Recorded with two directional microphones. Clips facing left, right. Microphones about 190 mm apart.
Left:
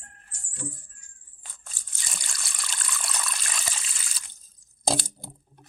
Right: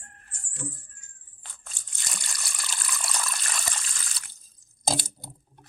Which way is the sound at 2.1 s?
Centre (ahead or behind).